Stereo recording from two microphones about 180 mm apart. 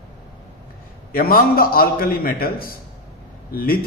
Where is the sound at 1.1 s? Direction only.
55° left (ahead or behind).